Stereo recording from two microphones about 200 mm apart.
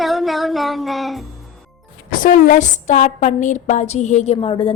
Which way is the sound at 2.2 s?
40° left (ahead or behind).